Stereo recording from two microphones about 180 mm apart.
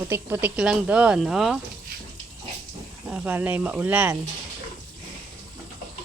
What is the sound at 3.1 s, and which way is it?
Speech, 10° right (ahead or behind).